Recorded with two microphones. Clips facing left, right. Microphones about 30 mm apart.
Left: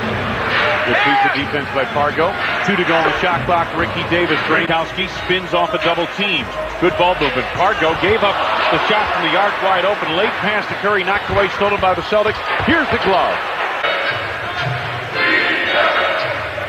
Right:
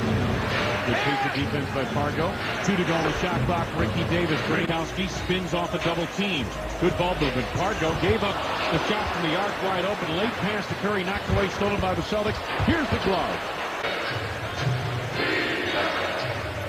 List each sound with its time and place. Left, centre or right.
0.5 s a sound: left
1.8 s speech: left
15.1 s music: left